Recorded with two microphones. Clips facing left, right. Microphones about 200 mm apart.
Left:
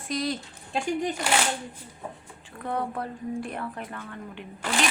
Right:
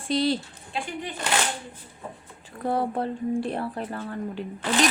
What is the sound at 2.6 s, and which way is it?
Speech, 35° right (ahead or behind).